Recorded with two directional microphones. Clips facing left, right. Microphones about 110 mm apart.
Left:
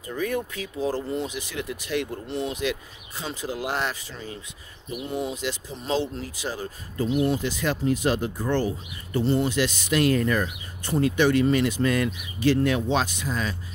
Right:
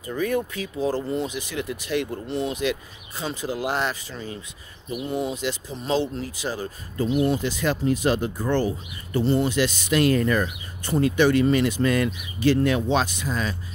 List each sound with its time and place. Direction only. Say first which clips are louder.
0.1 s speech: right 3 dB; 40° right (ahead or behind)
1.5 s speech: right 2 dB; 30° right (ahead or behind)
5.4 s speech: right 2 dB; 35° right (ahead or behind); by 7.3 s 50° right (ahead or behind)
7.4 s speech: right 2 dB; 30° right (ahead or behind)
9.1 s speech: right 1 dB; 60° right (ahead or behind)
9.6 s speech: right 2 dB; 40° right (ahead or behind)